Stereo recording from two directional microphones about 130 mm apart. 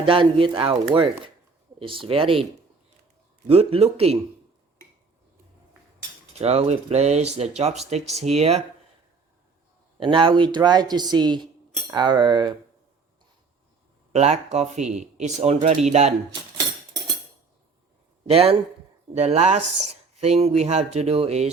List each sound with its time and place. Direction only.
0.0 s speech: 40° right (ahead or behind)
3.5 s speech: 50° right (ahead or behind)
6.4 s speech: 55° right (ahead or behind)
10.0 s speech: 40° right (ahead or behind)
14.1 s speech: 55° right (ahead or behind)
18.3 s speech: 50° right (ahead or behind)